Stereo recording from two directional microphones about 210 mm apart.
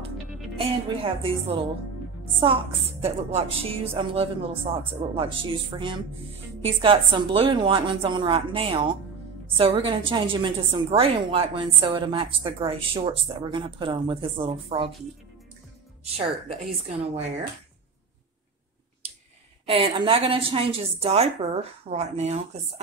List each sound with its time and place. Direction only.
0.6 s a woman's voice: 25° right (ahead or behind)
16.0 s a woman's voice: 30° right (ahead or behind)
19.6 s a woman's voice: 25° right (ahead or behind)